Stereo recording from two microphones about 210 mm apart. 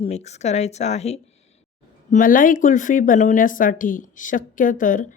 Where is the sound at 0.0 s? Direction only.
30° left (ahead or behind).